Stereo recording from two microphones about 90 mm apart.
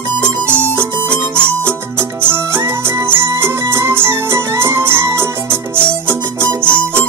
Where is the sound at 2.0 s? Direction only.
25° right (ahead or behind).